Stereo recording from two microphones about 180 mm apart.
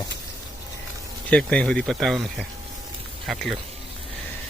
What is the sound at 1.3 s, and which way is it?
Speech, 5° left (ahead or behind).